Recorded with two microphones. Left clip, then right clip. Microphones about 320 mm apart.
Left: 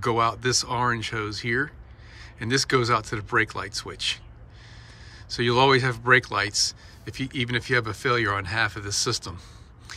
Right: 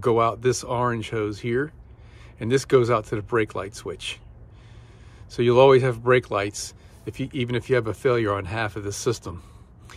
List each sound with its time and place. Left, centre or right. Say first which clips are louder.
0.0 s speech: right 3 dB; centre
5.3 s speech: right 4 dB; centre